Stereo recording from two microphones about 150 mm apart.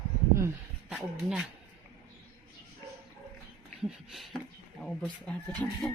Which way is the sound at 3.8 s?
Centre (ahead or behind).